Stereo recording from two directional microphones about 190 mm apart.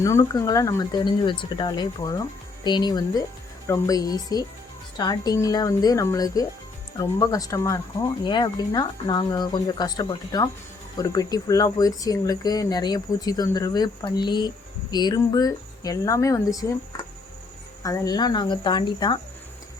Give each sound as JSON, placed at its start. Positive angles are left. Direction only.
{"t": 0.0, "sound": "speech", "side_deg": 15}
{"t": 17.8, "sound": "speech", "side_deg": 20}